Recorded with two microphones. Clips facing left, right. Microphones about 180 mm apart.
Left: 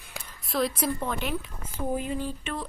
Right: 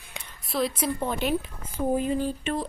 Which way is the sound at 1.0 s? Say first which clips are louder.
Right 4 dB; 25° right (ahead or behind).